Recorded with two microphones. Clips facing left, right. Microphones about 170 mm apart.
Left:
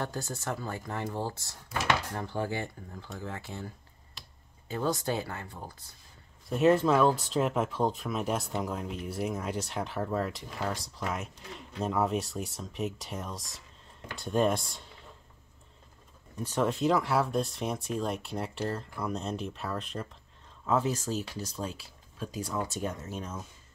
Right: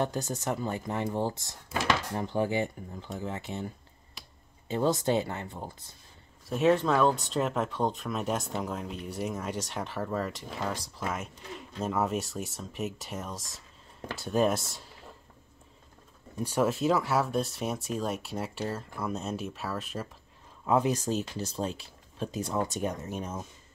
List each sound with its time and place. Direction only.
0.0 s speech: 20° right (ahead or behind)
6.5 s speech: centre (ahead or behind)
16.4 s speech: 5° right (ahead or behind)
20.6 s speech: 15° right (ahead or behind)